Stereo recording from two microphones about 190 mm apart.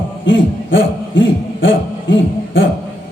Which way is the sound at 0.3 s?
80° left.